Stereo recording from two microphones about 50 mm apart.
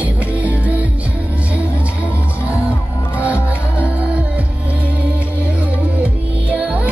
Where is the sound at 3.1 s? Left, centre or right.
Right.